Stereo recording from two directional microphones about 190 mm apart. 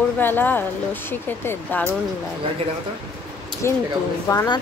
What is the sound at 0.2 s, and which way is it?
Speech, 10° left (ahead or behind).